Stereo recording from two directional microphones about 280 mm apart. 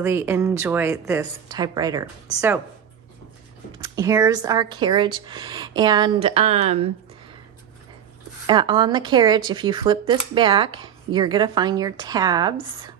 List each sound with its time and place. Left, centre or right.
0.0 s speech: centre
3.7 s speech: centre
8.5 s speech: centre